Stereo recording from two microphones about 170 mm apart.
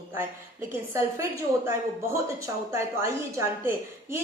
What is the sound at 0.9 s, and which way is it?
Speech, 15° right (ahead or behind).